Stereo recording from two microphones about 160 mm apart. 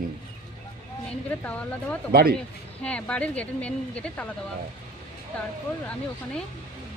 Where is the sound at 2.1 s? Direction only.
70° right (ahead or behind).